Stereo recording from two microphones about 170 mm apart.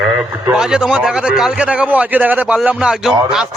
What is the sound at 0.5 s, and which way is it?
A man's voice, 5° right (ahead or behind).